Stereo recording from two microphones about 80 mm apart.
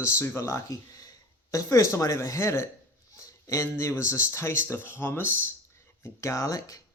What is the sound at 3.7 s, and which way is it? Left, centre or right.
Speech, left.